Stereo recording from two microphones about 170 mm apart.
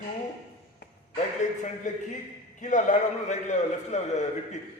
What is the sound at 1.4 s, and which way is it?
A man's voice, 45° left (ahead or behind).